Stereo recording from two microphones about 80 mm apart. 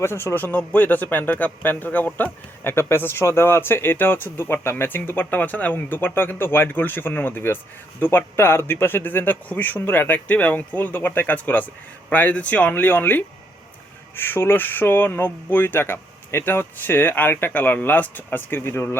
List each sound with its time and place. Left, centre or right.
0.0 s a man's voice: left